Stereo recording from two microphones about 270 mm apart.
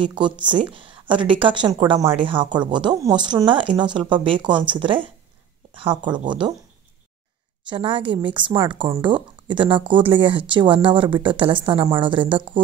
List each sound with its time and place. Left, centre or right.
0.0 s speech: centre
7.6 s speech: centre